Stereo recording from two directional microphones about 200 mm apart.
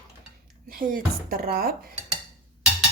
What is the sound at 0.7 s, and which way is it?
A woman's voice, 45° right (ahead or behind).